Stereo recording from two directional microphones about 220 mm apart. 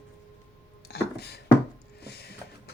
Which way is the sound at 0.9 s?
45° left (ahead or behind).